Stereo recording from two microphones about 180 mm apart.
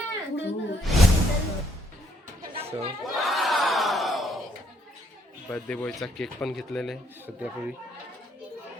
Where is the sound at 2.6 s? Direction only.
35° right (ahead or behind).